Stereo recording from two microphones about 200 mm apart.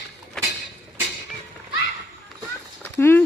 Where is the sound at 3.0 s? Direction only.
10° left (ahead or behind).